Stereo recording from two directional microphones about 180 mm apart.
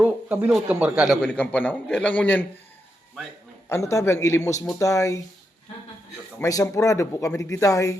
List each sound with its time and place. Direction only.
0.0 s a man's voice: 10° right (ahead or behind); by 2.5 s 10° left (ahead or behind)
3.7 s a man's voice: 15° left (ahead or behind)
6.4 s a man's voice: 20° left (ahead or behind)